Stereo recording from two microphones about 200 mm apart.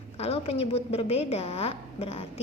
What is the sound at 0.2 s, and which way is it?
A woman's voice, 30° left (ahead or behind).